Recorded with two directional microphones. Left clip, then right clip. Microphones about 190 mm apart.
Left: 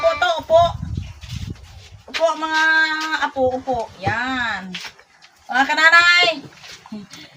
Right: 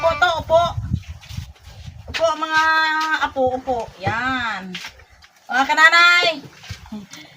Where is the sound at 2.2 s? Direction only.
5° left (ahead or behind).